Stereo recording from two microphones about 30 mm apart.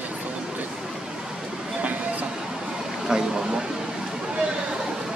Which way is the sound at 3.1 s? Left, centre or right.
Right.